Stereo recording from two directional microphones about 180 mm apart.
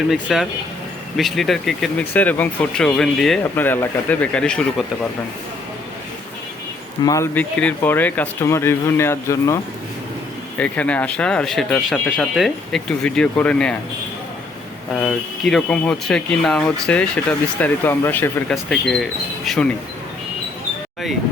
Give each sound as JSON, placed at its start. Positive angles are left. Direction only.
{"t": 0.1, "sound": "speech", "side_deg": 0}
{"t": 7.0, "sound": "speech", "side_deg": 15}
{"t": 7.5, "sound": "speech", "side_deg": 5}
{"t": 10.6, "sound": "speech", "side_deg": 5}
{"t": 14.9, "sound": "speech", "side_deg": 5}